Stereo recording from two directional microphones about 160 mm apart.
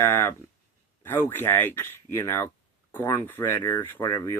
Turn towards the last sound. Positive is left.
turn(degrees=25)  # may be behind; listen again after turning